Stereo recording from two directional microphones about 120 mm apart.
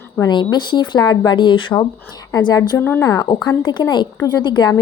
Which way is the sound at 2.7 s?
20° left (ahead or behind).